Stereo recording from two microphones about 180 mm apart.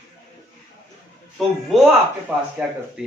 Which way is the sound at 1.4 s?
Centre (ahead or behind).